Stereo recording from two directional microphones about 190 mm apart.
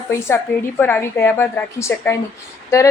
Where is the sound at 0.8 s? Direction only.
10° left (ahead or behind).